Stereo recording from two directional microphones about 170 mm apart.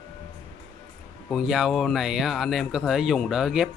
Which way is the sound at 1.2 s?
Centre (ahead or behind).